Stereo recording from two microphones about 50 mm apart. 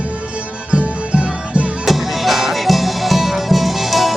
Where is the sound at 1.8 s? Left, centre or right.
Centre.